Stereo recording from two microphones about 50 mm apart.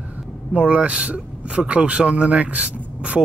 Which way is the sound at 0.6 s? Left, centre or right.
Right.